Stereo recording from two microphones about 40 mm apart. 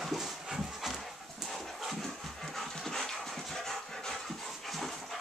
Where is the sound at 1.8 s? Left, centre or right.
Centre.